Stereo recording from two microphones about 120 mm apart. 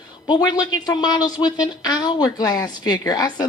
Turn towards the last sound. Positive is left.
turn(degrees=35)  # may be behind; listen again after turning